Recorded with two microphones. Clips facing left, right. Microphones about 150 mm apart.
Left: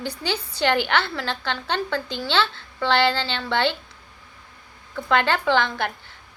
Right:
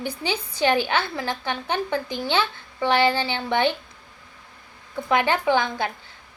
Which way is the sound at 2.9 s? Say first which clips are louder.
Right 1 dB; 70° left (ahead or behind).